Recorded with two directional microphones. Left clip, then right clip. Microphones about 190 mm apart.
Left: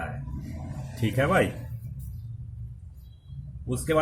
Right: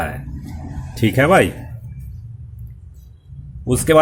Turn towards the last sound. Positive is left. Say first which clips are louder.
# right 12 dB
turn(degrees=-50)  # may be behind; listen again after turning